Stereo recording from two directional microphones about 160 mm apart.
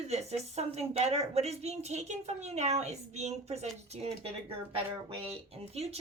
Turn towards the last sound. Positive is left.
turn(degrees=-40)  # may be behind; listen again after turning